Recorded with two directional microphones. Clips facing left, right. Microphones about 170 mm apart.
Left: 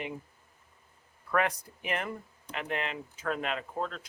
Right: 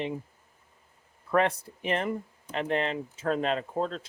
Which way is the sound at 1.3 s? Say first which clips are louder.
Right 4 dB; 30° right (ahead or behind).